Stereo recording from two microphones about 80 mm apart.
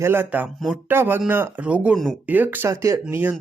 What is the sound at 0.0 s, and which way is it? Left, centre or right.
Speech, right.